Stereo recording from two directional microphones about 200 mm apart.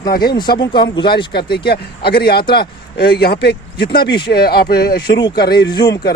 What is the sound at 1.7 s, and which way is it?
A man's voice, 50° left (ahead or behind).